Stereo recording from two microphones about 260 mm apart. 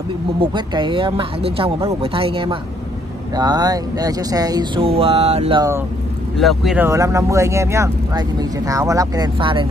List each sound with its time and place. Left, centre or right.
0.4 s speech: centre
6.4 s speech: centre